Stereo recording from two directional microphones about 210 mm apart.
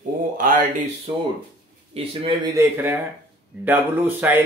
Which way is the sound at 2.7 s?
10° right (ahead or behind).